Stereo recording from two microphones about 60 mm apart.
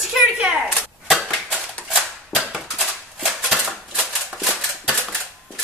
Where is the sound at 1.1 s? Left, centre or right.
Centre.